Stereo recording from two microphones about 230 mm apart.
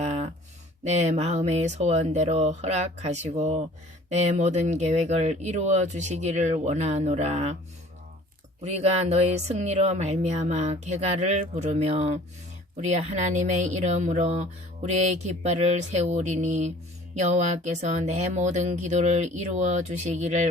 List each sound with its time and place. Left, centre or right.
0.9 s speech: right
8.6 s speech: right